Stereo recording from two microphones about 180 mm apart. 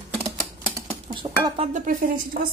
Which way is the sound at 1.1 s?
25° right (ahead or behind).